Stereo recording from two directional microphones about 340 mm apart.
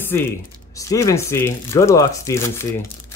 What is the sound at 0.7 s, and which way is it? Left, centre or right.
Speech, centre.